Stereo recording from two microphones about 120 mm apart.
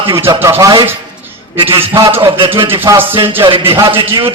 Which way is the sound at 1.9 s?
30° right (ahead or behind).